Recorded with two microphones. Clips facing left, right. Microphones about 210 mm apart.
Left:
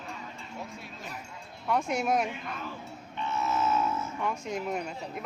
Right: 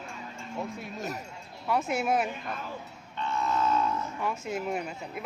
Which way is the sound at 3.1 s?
10° left (ahead or behind).